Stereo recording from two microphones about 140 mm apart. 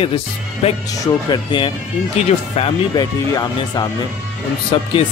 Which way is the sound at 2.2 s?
45° left (ahead or behind).